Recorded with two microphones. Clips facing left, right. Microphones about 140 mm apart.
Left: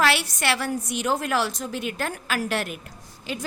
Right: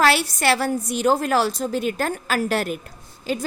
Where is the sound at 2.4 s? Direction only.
40° right (ahead or behind).